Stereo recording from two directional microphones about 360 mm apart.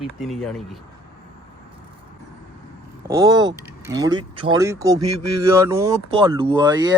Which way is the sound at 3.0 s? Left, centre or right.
Centre.